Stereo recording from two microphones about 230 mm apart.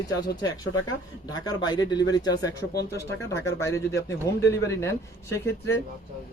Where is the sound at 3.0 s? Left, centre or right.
Centre.